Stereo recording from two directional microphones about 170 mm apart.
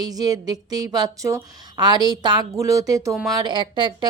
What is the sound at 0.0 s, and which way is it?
A woman's voice, 20° right (ahead or behind).